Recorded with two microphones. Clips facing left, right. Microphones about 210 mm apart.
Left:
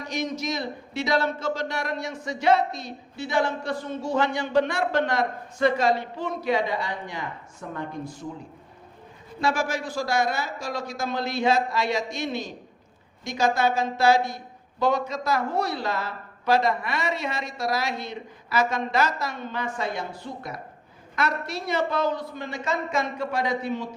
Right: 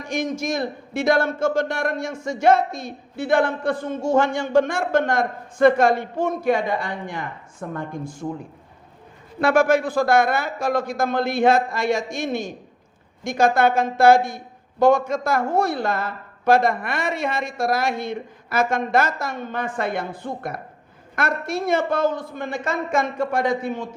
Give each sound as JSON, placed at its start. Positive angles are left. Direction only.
{"t": 0.0, "sound": "a man's voice", "side_deg": -50}
{"t": 9.4, "sound": "a man's voice", "side_deg": -60}